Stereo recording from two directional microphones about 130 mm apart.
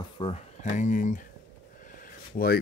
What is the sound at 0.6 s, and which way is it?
Speech, 70° left (ahead or behind).